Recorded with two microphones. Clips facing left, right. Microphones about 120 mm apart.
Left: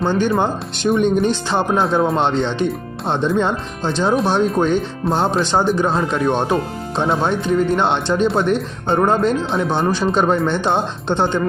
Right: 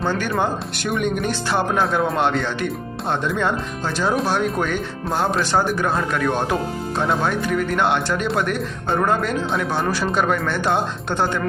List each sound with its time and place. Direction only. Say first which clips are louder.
0.0 s speech: left 4 dB; 20° left (ahead or behind)